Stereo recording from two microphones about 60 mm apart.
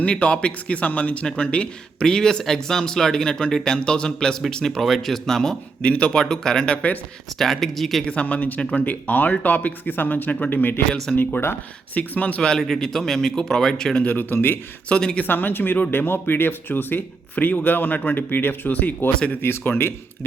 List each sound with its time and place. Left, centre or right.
0.0 s speech: centre
5.8 s speech: centre
8.0 s speech: left
11.9 s speech: left
12.4 s speech: centre
14.0 s speech: left
14.8 s speech: centre
15.2 s speech: left